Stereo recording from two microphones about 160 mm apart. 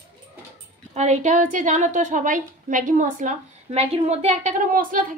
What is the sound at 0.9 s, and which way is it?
A woman's voice, 45° right (ahead or behind).